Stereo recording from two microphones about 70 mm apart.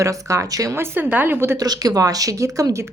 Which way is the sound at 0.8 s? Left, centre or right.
Right.